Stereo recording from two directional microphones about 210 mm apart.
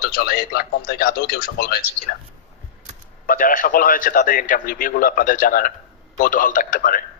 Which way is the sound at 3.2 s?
40° left (ahead or behind).